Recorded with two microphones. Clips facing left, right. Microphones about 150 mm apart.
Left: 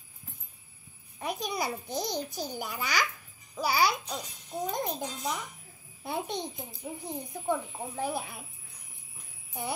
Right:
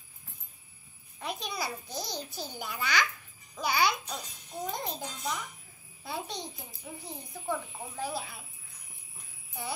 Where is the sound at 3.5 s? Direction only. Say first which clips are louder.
Left 2 dB; 5° left (ahead or behind).